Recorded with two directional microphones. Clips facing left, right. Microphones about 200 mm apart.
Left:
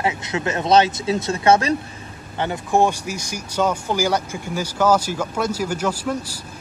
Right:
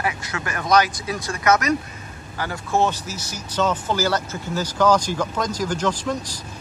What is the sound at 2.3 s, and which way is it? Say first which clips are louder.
Speech: left 3 dB; 20° left (ahead or behind).